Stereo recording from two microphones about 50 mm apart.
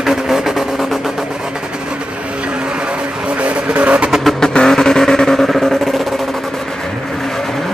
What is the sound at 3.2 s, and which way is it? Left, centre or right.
Vehicle, right.